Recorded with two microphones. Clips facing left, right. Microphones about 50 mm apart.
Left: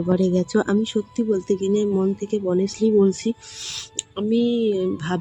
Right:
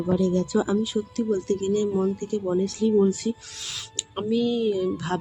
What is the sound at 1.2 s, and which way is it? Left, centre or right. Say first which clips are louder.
Speech: left 4 dB; left.